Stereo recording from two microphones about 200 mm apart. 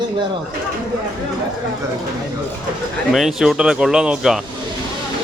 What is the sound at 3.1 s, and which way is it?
Speech, centre (ahead or behind).